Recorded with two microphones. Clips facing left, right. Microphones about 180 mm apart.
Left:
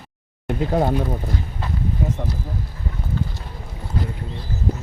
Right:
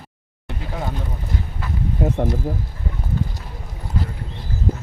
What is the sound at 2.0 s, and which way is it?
Speech, 65° right (ahead or behind).